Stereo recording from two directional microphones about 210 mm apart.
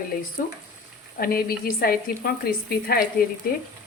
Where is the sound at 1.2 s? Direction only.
45° left (ahead or behind).